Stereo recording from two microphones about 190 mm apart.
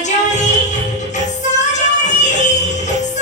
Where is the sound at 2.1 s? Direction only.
40° left (ahead or behind).